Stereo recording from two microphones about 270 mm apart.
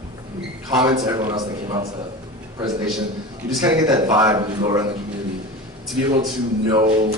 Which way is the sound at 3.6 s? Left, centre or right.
Centre.